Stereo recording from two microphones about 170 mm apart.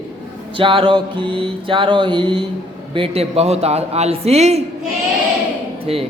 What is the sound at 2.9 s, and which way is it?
A man's voice, 35° right (ahead or behind).